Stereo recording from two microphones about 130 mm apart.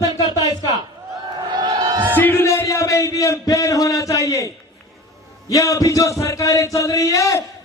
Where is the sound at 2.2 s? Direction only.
15° left (ahead or behind).